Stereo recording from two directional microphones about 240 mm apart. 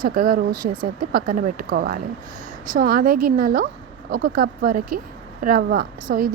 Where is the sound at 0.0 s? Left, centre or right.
Right.